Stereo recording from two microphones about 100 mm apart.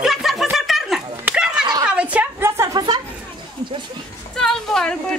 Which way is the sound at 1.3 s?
10° right (ahead or behind).